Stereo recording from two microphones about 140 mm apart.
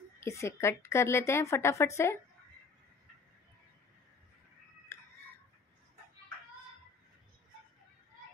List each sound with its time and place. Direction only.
0.2 s a woman's voice: 20° left (ahead or behind)